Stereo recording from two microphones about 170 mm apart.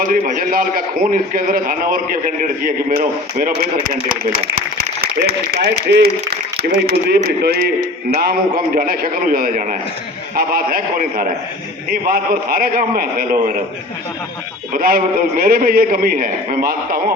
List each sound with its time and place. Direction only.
0.0 s a man's voice: 55° right (ahead or behind)
14.7 s a man's voice: 60° right (ahead or behind)